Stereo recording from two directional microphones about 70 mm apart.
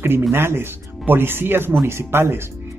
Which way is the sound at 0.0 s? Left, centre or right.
Right.